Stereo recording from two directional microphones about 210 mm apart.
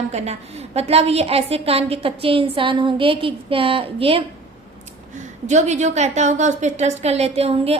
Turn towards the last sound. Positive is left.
turn(degrees=-30)  # may be behind; listen again after turning